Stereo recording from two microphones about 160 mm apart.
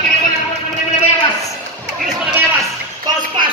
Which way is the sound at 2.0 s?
5° right (ahead or behind).